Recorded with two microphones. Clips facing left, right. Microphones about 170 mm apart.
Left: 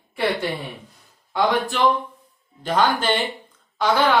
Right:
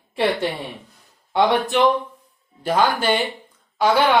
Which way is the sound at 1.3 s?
25° right (ahead or behind).